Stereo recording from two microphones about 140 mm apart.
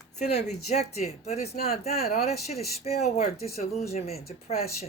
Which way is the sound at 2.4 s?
50° left (ahead or behind).